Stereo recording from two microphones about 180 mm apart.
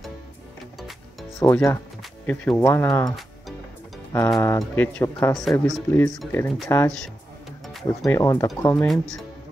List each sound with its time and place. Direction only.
1.4 s speech: 10° left (ahead or behind)
7.6 s music: centre (ahead or behind)
8.1 s speech: 15° left (ahead or behind)
8.6 s speech: 5° left (ahead or behind)